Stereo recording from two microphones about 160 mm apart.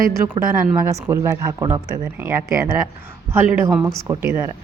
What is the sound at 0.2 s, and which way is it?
Speech, 15° right (ahead or behind).